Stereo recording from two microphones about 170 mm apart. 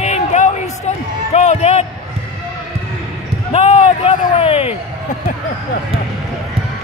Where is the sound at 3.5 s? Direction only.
40° left (ahead or behind).